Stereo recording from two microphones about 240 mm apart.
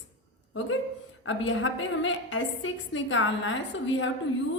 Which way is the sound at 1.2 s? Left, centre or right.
Left.